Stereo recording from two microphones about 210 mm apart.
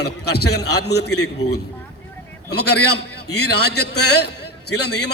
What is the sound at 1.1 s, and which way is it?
Speech, 90° left.